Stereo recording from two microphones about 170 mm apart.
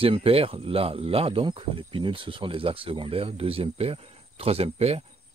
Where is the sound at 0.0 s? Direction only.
35° right (ahead or behind).